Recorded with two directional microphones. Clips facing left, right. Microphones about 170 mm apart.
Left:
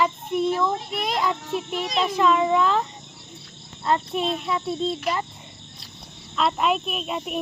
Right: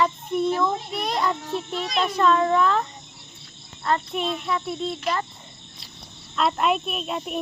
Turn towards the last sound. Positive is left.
turn(degrees=5)  # may be behind; listen again after turning